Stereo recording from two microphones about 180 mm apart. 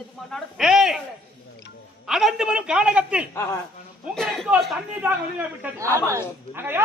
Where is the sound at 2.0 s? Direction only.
Centre (ahead or behind).